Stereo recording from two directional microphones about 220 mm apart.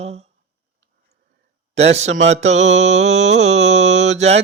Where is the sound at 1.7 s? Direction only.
30° right (ahead or behind).